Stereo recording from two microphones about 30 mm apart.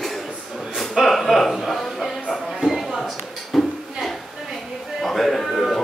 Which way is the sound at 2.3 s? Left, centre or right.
Centre.